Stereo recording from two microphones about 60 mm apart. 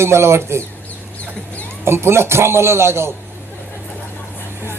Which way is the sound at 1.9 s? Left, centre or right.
Right.